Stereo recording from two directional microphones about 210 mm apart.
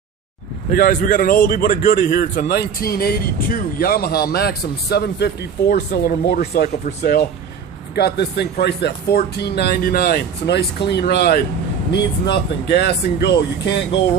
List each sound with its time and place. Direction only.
0.7 s a man's voice: 40° left (ahead or behind)
7.9 s a man's voice: 50° left (ahead or behind)